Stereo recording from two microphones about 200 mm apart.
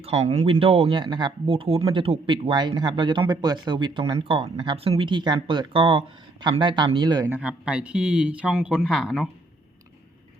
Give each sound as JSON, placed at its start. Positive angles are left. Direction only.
{"t": 0.0, "sound": "speech", "side_deg": -35}
{"t": 7.3, "sound": "speech", "side_deg": -5}